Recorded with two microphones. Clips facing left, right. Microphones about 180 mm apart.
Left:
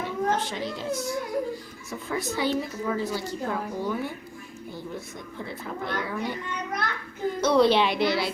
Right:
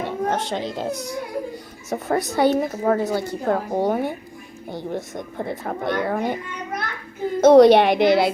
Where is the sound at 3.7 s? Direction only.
70° right (ahead or behind).